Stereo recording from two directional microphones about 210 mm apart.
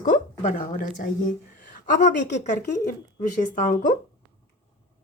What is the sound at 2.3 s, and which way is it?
Speech, 35° left (ahead or behind).